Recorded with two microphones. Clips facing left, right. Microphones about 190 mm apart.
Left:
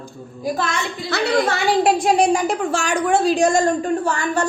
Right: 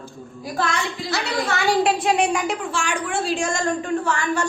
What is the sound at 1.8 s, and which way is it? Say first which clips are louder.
A woman's voice: left 4 dB; 40° left (ahead or behind).